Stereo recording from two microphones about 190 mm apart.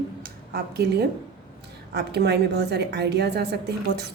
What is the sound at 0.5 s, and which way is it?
A woman's voice, 60° right (ahead or behind).